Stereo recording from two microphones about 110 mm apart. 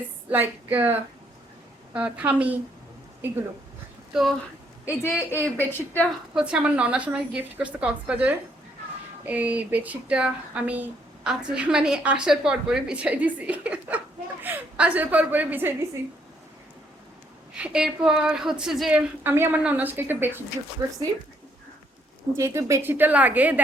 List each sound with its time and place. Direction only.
0.3 s speech: 15° right (ahead or behind)
4.1 s speech: 5° right (ahead or behind)
4.9 s a woman's voice: 20° left (ahead or behind)
6.3 s speech: 10° right (ahead or behind)
17.5 s speech: 10° right (ahead or behind)
20.8 s speech: 30° right (ahead or behind)
22.4 s speech: 25° right (ahead or behind)